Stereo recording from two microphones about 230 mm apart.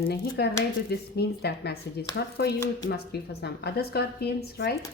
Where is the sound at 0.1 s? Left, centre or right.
Left.